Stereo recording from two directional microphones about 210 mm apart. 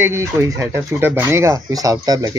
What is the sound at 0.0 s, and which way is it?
Speech, 10° right (ahead or behind).